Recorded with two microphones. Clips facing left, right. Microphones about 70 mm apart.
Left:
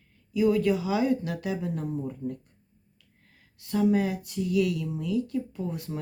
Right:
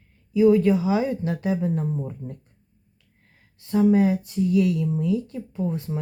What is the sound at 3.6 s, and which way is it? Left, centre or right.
Speech, right.